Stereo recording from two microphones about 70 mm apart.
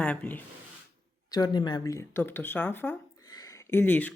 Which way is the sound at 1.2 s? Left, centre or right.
Left.